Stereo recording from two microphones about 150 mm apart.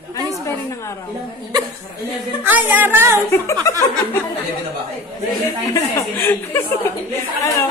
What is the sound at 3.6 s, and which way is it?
Speech, 20° left (ahead or behind).